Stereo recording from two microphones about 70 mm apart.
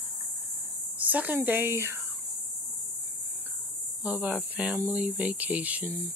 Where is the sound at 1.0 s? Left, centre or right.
Right.